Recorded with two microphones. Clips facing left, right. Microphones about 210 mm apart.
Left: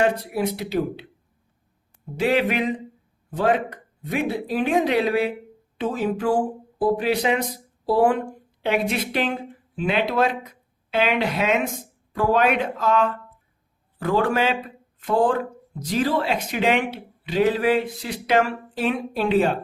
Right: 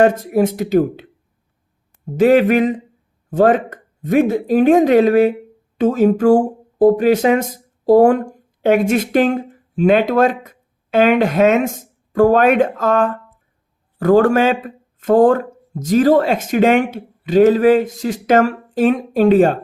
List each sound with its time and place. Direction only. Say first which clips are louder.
0.0 s speech: right 8 dB; 45° right (ahead or behind)
2.1 s speech: right 10 dB; 45° right (ahead or behind)